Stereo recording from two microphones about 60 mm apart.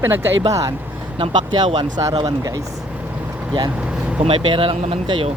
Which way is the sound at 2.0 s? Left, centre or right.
Right.